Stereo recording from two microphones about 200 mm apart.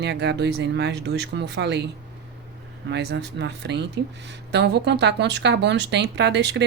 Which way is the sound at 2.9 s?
55° right (ahead or behind).